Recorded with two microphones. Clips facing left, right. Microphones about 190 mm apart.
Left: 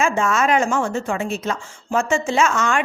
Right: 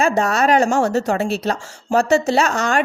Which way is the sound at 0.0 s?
35° right (ahead or behind).